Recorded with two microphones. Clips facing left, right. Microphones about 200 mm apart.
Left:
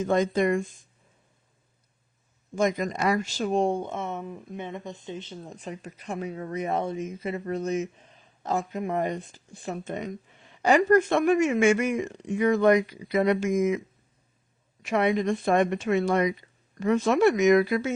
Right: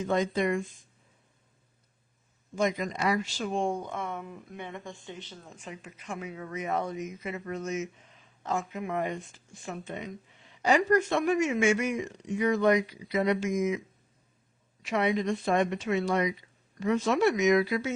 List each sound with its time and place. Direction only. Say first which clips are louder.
0.0 s speech: left 4 dB; 45° left (ahead or behind)
2.6 s speech: left 3 dB; 45° left (ahead or behind); by 5.4 s 20° left (ahead or behind)
5.5 s speech: left 6 dB; 35° left (ahead or behind)